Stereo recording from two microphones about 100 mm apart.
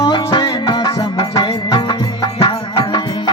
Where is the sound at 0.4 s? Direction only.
35° left (ahead or behind).